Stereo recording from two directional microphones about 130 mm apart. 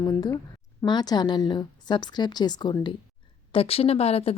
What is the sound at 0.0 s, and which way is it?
Speech, 25° left (ahead or behind).